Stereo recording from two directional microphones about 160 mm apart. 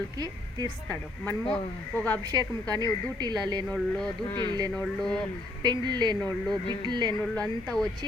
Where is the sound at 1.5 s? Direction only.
10° left (ahead or behind).